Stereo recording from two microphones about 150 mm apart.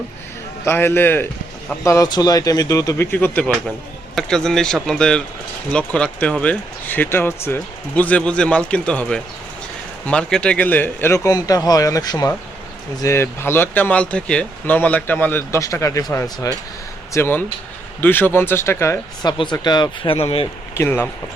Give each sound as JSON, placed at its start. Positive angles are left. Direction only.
{"t": 0.6, "sound": "a man's voice", "side_deg": 15}
{"t": 19.2, "sound": "speech", "side_deg": 30}
{"t": 20.7, "sound": "speech", "side_deg": 15}